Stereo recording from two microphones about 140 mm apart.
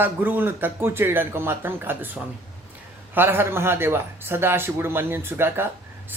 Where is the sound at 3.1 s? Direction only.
15° right (ahead or behind).